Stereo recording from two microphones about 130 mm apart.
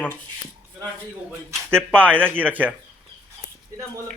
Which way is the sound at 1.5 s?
15° right (ahead or behind).